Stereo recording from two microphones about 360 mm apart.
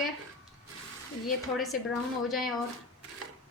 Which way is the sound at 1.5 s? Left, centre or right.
Centre.